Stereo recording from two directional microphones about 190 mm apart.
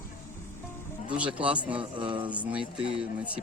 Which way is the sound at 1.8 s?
25° right (ahead or behind).